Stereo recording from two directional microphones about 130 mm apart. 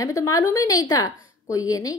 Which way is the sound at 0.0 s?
25° left (ahead or behind).